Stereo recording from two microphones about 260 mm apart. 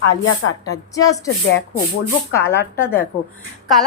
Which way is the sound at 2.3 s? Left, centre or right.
Centre.